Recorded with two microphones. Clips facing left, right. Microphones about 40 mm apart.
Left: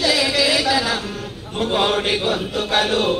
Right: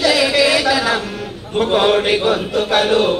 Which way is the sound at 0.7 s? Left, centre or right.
Centre.